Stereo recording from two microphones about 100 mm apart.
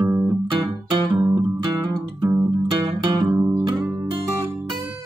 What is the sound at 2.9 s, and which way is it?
Music, 55° right (ahead or behind).